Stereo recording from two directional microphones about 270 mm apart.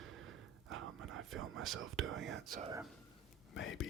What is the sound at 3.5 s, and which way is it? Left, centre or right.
Speech, left.